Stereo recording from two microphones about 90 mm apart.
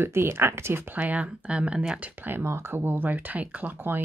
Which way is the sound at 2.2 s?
25° right (ahead or behind).